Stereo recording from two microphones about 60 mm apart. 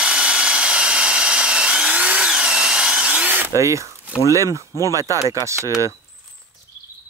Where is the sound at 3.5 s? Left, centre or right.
Right.